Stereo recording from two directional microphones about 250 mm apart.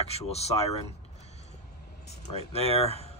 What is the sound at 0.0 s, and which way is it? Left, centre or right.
Speech, left.